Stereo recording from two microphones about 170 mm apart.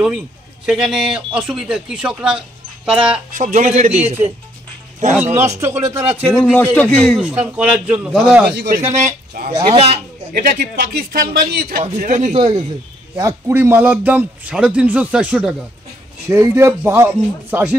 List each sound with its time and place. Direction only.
0.7 s a man's voice: 5° right (ahead or behind)
3.3 s speech: 50° right (ahead or behind)
3.6 s a man's voice: 40° right (ahead or behind)
5.6 s a man's voice: 15° right (ahead or behind)
6.4 s a man's voice: 10° left (ahead or behind)
7.1 s a man's voice: 5° right (ahead or behind)
8.5 s speech: 75° right (ahead or behind)
8.9 s speech: 55° right (ahead or behind)
11.8 s speech: 50° right (ahead or behind)
12.4 s a man's voice: 30° right (ahead or behind)
13.1 s a man's voice: 15° right (ahead or behind)
16.3 s a man's voice: 15° right (ahead or behind)